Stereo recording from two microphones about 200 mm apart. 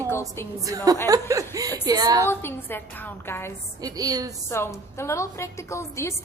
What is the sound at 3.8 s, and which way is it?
Speech, 20° right (ahead or behind).